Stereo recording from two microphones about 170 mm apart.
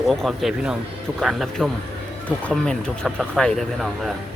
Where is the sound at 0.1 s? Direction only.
Centre (ahead or behind).